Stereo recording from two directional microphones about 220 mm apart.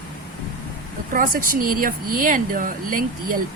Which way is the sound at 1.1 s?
40° right (ahead or behind).